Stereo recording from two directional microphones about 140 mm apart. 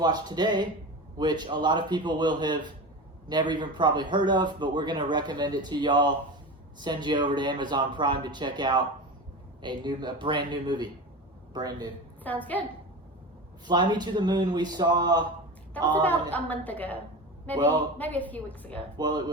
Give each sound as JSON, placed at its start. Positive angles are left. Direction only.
{"t": 0.0, "sound": "a man's voice", "side_deg": -30}
{"t": 12.2, "sound": "a woman's voice", "side_deg": 10}
{"t": 13.7, "sound": "speech", "side_deg": -30}
{"t": 15.8, "sound": "a woman's voice", "side_deg": 10}
{"t": 18.9, "sound": "a man's voice", "side_deg": -30}